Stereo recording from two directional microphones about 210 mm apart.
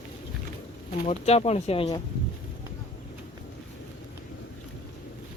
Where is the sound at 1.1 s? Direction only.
30° left (ahead or behind).